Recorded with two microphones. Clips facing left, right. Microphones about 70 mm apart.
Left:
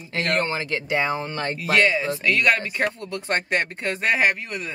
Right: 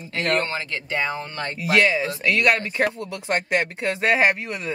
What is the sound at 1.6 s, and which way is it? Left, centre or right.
Speech, centre.